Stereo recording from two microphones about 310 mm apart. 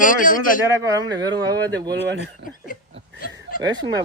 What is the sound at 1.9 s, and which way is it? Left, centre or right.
Speech, right.